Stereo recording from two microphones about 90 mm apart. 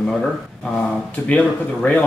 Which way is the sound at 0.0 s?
5° left (ahead or behind).